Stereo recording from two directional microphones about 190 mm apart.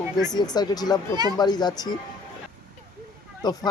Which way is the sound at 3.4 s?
20° left (ahead or behind).